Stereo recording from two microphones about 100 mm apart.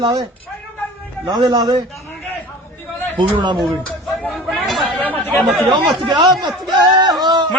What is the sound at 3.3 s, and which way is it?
Speech, 50° right (ahead or behind).